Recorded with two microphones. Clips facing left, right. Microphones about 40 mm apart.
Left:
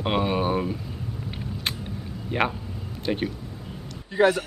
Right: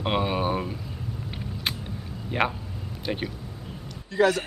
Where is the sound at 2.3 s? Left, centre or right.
Centre.